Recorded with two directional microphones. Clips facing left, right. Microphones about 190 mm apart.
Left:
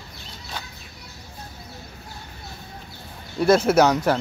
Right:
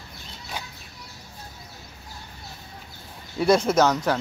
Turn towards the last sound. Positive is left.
turn(degrees=10)  # may be behind; listen again after turning